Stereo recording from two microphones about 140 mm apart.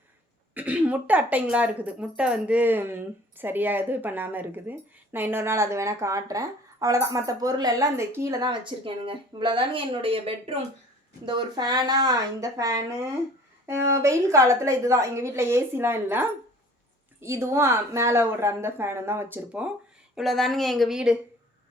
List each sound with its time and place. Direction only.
0.5 s speech: 10° right (ahead or behind); by 10.6 s 45° right (ahead or behind)
11.3 s a woman's voice: 35° right (ahead or behind); by 19.7 s 10° right (ahead or behind)
20.1 s speech: centre (ahead or behind)